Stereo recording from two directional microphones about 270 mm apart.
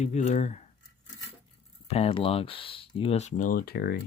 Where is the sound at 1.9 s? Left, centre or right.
Left.